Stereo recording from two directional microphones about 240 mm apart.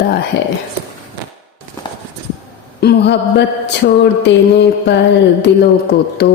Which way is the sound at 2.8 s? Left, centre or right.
Left.